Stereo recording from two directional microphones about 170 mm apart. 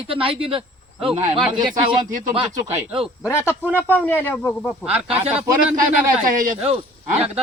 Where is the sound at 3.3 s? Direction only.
15° left (ahead or behind).